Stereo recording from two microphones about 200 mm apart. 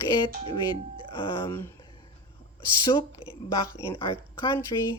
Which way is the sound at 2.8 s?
25° left (ahead or behind).